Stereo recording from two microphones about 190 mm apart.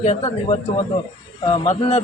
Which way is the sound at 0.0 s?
35° left (ahead or behind).